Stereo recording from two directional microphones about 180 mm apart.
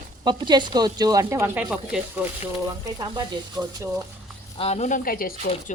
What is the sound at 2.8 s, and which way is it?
Speech, 20° right (ahead or behind).